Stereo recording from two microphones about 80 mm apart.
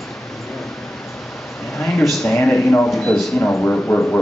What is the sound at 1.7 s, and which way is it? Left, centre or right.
A man's voice, centre.